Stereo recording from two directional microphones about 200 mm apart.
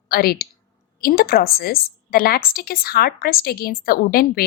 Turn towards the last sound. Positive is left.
turn(degrees=45)  # may be behind; listen again after turning